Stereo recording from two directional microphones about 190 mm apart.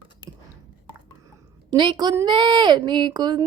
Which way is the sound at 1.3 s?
20° right (ahead or behind).